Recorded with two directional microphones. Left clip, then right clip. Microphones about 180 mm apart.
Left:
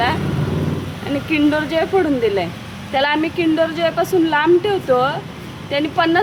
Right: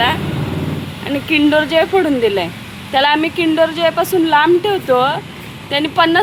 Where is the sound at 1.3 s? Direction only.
15° right (ahead or behind).